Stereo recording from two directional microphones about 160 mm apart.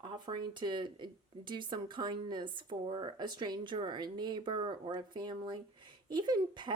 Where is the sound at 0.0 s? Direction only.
30° right (ahead or behind).